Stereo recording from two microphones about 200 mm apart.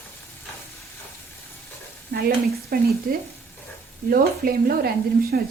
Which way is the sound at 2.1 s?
50° right (ahead or behind).